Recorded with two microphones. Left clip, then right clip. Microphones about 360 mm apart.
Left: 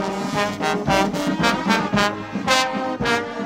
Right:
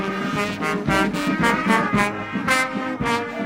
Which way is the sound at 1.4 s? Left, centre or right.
Left.